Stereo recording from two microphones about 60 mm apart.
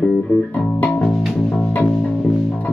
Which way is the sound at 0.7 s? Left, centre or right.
Left.